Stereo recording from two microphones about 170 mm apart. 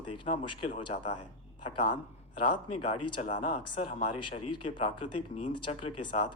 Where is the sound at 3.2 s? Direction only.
45° left (ahead or behind).